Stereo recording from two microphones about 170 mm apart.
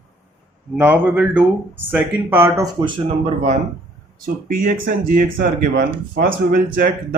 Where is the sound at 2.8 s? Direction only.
35° right (ahead or behind).